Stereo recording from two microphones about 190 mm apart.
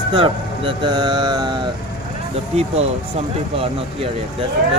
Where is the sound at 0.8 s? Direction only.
25° right (ahead or behind).